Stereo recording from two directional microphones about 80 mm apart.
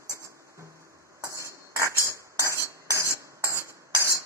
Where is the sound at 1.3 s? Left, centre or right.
Right.